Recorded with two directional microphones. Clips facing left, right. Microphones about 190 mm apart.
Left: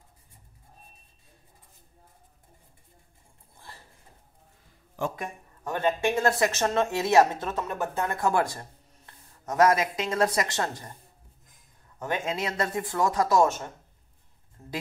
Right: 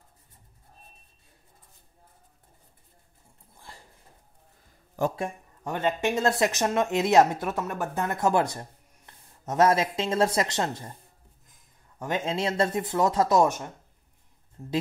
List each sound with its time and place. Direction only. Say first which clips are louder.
5.6 s speech: left 1 dB; 20° right (ahead or behind)
12.1 s speech: right 2 dB; 30° right (ahead or behind)